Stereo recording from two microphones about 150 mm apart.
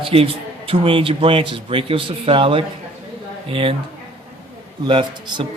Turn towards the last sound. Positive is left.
turn(degrees=-35)  # may be behind; listen again after turning